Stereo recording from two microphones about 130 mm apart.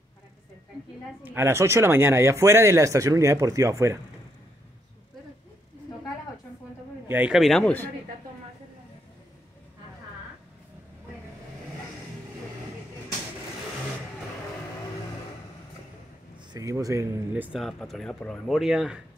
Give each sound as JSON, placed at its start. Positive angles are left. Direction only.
{"t": 1.2, "sound": "speech", "side_deg": -20}
{"t": 7.1, "sound": "speech", "side_deg": -10}
{"t": 7.3, "sound": "speech", "side_deg": 0}
{"t": 16.5, "sound": "speech", "side_deg": -25}
{"t": 17.3, "sound": "speech", "side_deg": -10}